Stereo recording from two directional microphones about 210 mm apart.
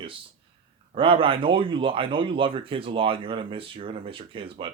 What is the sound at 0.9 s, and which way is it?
Speech, 25° right (ahead or behind).